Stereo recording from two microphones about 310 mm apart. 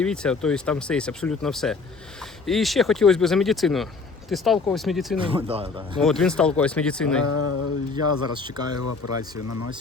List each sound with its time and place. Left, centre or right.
0.0 s speech: centre
5.2 s speech: centre
6.0 s speech: centre
7.3 s a sound: left
8.4 s speech: centre
8.8 s speech: left